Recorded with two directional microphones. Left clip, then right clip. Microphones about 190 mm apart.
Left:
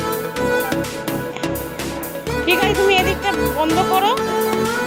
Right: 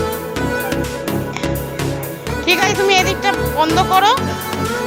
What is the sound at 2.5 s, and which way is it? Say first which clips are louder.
Music: right 2 dB; 15° left (ahead or behind).